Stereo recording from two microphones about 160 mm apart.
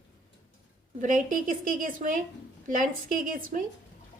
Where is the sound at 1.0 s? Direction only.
55° right (ahead or behind).